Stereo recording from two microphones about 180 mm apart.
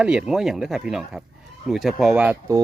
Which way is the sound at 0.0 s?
5° right (ahead or behind).